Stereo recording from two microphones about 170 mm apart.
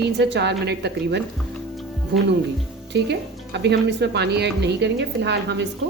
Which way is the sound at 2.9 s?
85° right.